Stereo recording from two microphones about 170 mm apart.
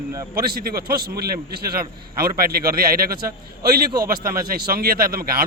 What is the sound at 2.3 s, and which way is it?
Speech, 60° right (ahead or behind).